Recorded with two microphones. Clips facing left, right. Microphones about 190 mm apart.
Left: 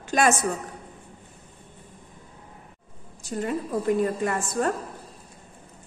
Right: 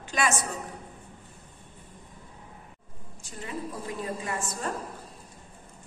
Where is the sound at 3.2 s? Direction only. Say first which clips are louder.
Left 13 dB; 40° left (ahead or behind).